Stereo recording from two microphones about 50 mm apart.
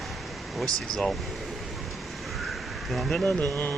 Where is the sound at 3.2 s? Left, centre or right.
Left.